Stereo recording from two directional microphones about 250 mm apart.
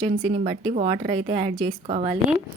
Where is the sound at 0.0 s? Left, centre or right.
Right.